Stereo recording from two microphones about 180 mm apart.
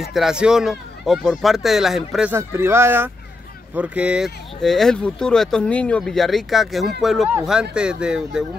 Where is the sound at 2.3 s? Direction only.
15° right (ahead or behind).